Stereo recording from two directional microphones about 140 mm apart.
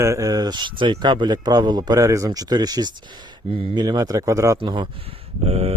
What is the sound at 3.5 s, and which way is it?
Speech, 40° right (ahead or behind).